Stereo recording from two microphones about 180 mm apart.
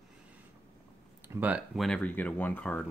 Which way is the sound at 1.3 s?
10° right (ahead or behind).